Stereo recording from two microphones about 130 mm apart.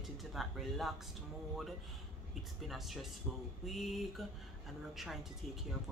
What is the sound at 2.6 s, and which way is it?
Speech, centre (ahead or behind).